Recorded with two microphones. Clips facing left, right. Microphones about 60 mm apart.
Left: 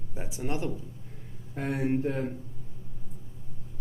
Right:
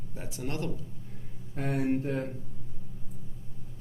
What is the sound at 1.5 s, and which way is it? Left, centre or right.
Speech, centre.